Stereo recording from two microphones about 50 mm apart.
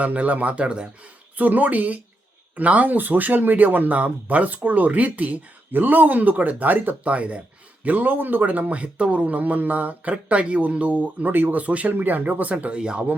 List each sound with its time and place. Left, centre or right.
0.0 s speech: right
1.4 s speech: right
11.6 s speech: right
12.7 s speech: centre